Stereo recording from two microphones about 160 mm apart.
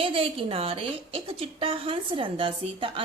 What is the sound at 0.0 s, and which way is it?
A woman's voice, 35° right (ahead or behind).